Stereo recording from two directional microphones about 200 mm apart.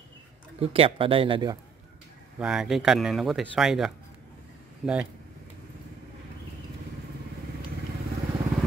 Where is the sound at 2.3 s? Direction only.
5° right (ahead or behind).